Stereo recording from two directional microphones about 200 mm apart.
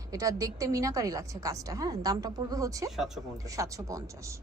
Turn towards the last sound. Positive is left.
turn(degrees=-15)  # may be behind; listen again after turning